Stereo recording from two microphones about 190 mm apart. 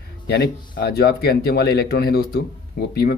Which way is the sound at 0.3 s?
55° left (ahead or behind).